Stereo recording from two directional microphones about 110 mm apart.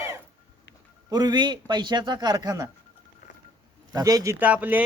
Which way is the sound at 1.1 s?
40° right (ahead or behind).